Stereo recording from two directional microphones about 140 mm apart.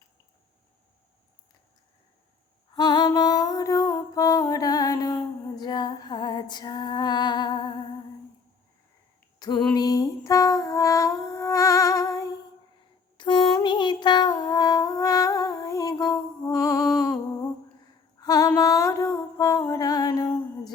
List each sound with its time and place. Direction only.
2.7 s music: 30° left (ahead or behind)
9.4 s a sound: 30° left (ahead or behind)
9.7 s music: 25° left (ahead or behind)
18.2 s music: 25° left (ahead or behind)